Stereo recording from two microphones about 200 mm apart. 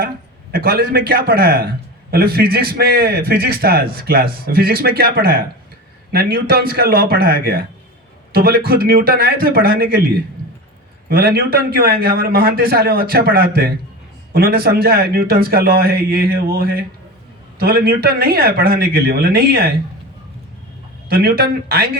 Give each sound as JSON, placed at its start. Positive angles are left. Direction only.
{"t": 0.5, "sound": "a man's voice", "side_deg": -50}
{"t": 11.1, "sound": "a man's voice", "side_deg": -50}
{"t": 21.1, "sound": "a man's voice", "side_deg": -50}